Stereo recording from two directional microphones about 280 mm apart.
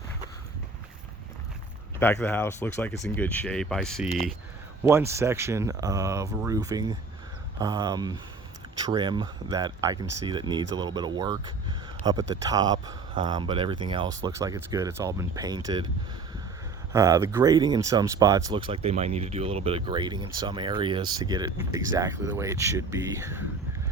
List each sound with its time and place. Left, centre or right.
2.0 s speech: centre
4.9 s speech: centre
16.9 s speech: centre